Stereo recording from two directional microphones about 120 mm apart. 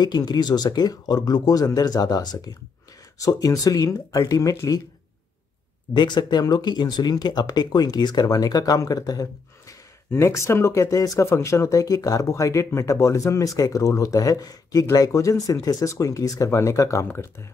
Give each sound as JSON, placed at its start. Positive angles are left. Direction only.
{"t": 0.0, "sound": "speech", "side_deg": 35}
{"t": 5.9, "sound": "speech", "side_deg": 40}